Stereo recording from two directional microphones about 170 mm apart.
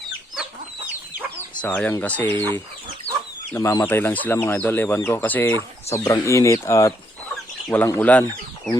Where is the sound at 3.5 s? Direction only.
20° left (ahead or behind).